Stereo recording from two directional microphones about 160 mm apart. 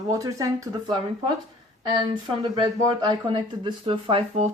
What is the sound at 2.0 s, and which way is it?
Speech, 30° right (ahead or behind).